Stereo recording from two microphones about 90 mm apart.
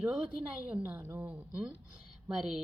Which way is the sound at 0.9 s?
25° right (ahead or behind).